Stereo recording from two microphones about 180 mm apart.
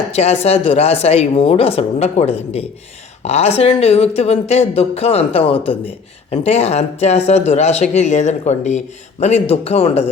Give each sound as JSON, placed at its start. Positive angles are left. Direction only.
{"t": 0.1, "sound": "speech", "side_deg": 35}